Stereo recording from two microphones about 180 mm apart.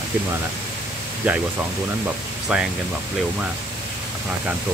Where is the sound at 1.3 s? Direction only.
10° right (ahead or behind).